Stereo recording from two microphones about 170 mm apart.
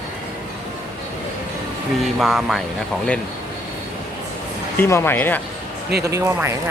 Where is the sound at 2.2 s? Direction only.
Centre (ahead or behind).